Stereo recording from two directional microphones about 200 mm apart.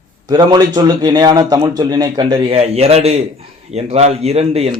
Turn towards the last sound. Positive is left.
turn(degrees=-30)  # may be behind; listen again after turning